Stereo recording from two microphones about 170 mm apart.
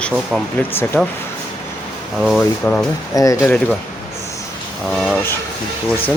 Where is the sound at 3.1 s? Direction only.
20° left (ahead or behind).